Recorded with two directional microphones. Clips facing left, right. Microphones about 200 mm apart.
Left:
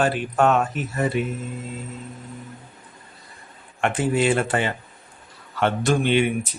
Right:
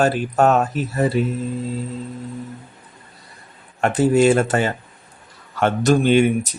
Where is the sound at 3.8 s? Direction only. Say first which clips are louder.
Right 6 dB; 40° right (ahead or behind).